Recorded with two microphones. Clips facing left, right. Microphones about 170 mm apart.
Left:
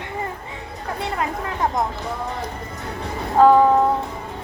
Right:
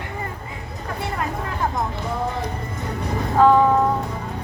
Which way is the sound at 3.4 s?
40° left (ahead or behind).